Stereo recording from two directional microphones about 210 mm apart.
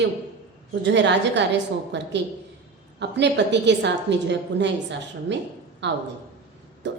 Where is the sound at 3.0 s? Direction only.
55° right (ahead or behind).